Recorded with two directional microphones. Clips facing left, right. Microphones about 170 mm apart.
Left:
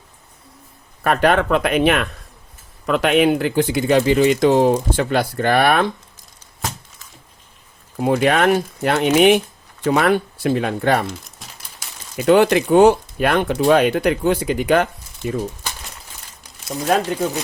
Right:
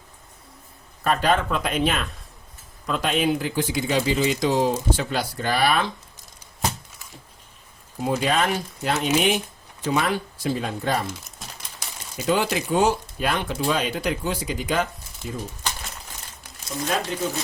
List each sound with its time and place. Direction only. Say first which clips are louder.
1.0 s speech: left 5 dB; 65° left (ahead or behind)
7.9 s speech: left 6 dB; 65° left (ahead or behind)
12.1 s speech: left 9 dB; 65° left (ahead or behind)